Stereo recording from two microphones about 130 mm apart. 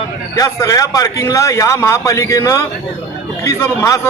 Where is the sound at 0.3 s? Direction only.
25° left (ahead or behind).